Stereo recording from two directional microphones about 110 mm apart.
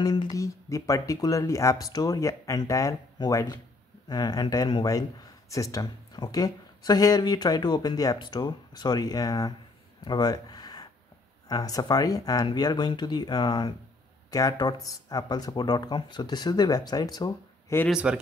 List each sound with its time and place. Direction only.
0.0 s speech: 35° left (ahead or behind)
10.0 s a sound: 40° left (ahead or behind)
11.4 s speech: 35° left (ahead or behind)
17.8 s speech: 10° right (ahead or behind)